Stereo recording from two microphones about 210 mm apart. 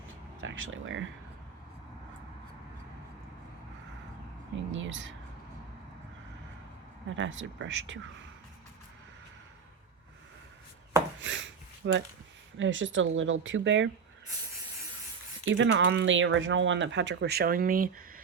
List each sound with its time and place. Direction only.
0.4 s speech: 70° right (ahead or behind)
4.7 s speech: 65° right (ahead or behind)
7.2 s speech: 60° right (ahead or behind)
11.2 s a sound: 65° right (ahead or behind)
12.5 s speech: 65° right (ahead or behind)
15.4 s speech: 60° right (ahead or behind); by 17.8 s 40° right (ahead or behind)